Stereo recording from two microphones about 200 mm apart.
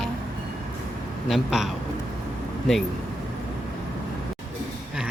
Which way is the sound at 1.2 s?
Centre (ahead or behind).